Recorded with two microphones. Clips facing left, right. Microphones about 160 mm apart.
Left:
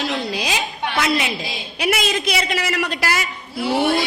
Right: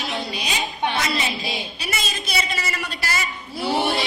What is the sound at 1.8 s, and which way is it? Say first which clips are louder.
A man's voice: left 9 dB; 90° left.